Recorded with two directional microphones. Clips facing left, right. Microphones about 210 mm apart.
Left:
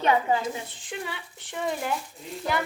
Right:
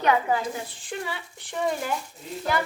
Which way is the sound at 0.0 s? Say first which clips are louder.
Even; 25° left (ahead or behind).